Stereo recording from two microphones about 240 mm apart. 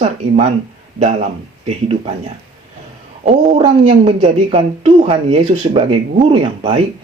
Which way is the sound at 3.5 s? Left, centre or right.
Right.